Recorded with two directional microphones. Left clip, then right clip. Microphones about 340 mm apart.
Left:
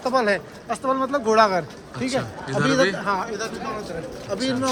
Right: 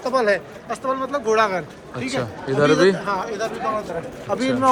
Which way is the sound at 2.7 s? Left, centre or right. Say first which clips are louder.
Right 3 dB; left.